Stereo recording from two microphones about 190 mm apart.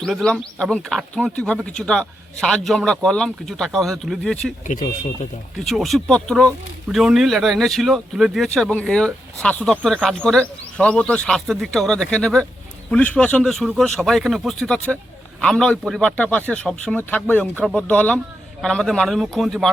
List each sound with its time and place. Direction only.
0.0 s speech: 5° left (ahead or behind)
4.6 s speech: 40° left (ahead or behind)
5.5 s speech: centre (ahead or behind)